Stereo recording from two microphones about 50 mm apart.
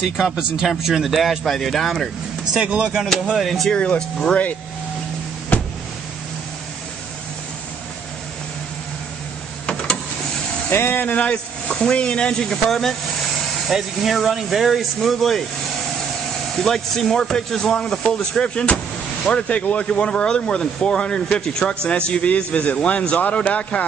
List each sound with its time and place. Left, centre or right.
0.2 s speech: centre
2.6 s speech: right
3.3 s speech: centre
3.7 s speech: left
9.7 s a sound: left
10.7 s speech: left
11.1 s speech: left; by 15.4 s centre
16.5 s speech: centre; by 23.9 s left